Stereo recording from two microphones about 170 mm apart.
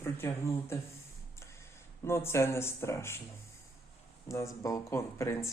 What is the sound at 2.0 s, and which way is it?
Speech, 15° left (ahead or behind).